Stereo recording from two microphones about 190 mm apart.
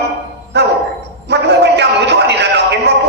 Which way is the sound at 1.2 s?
60° right (ahead or behind).